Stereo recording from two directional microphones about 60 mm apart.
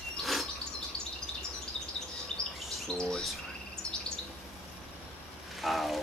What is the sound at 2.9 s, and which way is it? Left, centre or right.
Chirp, centre.